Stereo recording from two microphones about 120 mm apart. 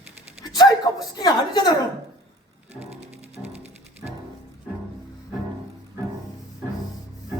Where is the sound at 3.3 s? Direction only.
60° right (ahead or behind).